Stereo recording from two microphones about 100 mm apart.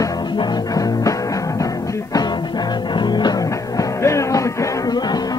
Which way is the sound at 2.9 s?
45° left (ahead or behind).